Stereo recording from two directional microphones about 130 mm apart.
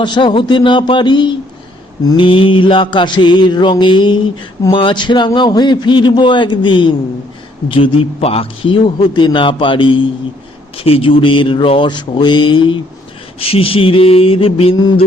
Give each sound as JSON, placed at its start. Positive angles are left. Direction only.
{"t": 0.0, "sound": "a man's voice", "side_deg": 35}
{"t": 13.5, "sound": "mantra", "side_deg": 45}